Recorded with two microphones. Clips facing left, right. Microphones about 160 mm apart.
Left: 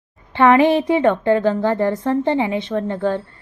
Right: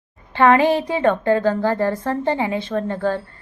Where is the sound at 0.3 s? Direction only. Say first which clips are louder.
Left 2 dB; 20° left (ahead or behind).